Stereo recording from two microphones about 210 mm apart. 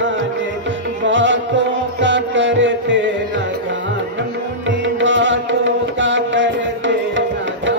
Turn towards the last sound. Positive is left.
turn(degrees=-60)  # may be behind; listen again after turning